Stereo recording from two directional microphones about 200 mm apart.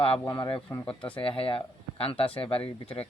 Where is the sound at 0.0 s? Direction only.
25° left (ahead or behind).